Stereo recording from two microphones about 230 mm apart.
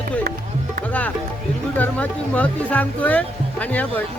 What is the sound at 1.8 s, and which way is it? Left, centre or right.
Speech, centre.